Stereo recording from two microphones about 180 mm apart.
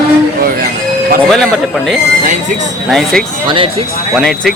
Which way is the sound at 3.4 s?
30° right (ahead or behind).